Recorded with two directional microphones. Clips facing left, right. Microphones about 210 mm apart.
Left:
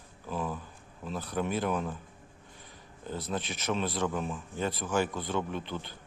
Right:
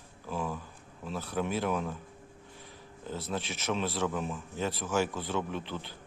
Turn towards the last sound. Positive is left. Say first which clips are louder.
# left 1 dB
turn(degrees=0)  # may be behind; listen again after turning